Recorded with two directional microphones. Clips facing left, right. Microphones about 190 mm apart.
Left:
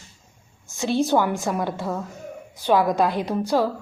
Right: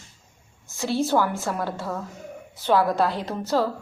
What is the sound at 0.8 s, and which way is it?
A woman's voice, 20° left (ahead or behind).